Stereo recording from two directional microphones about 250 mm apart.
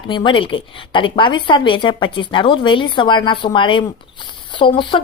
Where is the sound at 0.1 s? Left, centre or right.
Centre.